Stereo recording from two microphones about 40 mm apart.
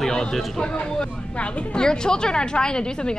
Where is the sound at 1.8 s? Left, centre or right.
Centre.